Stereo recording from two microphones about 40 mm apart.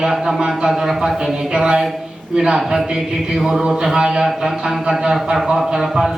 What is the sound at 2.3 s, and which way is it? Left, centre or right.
A man's voice, centre.